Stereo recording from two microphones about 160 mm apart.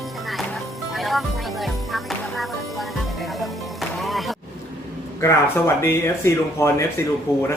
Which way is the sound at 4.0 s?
Centre (ahead or behind).